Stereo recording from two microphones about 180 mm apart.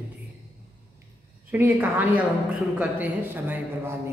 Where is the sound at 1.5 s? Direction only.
10° right (ahead or behind).